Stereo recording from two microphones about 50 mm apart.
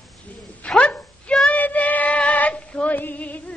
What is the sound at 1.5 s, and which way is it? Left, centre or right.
Child singing, left.